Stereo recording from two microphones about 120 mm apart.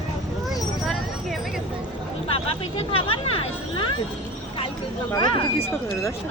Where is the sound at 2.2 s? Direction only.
55° left (ahead or behind).